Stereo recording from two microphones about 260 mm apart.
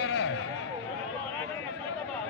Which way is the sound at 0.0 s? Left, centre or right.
Left.